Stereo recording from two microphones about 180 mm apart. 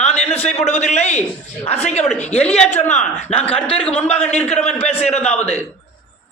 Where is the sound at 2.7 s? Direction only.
40° left (ahead or behind).